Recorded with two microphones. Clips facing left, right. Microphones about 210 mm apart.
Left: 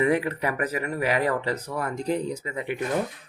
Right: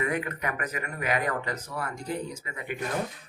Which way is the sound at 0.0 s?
30° left (ahead or behind).